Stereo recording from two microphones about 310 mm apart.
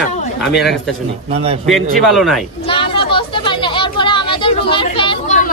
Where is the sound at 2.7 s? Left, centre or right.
Centre.